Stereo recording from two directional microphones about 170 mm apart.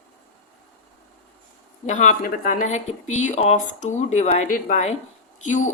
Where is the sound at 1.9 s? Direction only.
45° left (ahead or behind).